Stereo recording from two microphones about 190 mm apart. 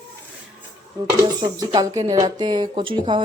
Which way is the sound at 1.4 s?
20° right (ahead or behind).